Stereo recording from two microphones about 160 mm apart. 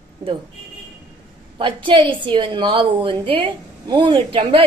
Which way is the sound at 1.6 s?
30° right (ahead or behind).